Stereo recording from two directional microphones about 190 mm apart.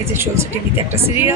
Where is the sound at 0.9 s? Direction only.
10° right (ahead or behind).